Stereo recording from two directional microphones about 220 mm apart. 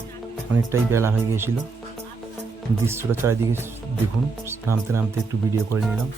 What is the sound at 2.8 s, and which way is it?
Speech, 10° right (ahead or behind).